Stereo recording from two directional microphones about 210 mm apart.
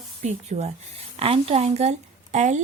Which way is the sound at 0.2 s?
35° right (ahead or behind).